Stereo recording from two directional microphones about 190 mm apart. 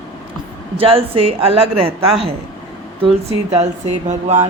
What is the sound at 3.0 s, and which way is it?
Speech, 30° right (ahead or behind).